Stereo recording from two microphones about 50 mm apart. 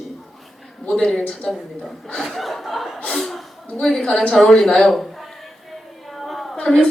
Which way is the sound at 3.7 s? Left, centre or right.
Centre.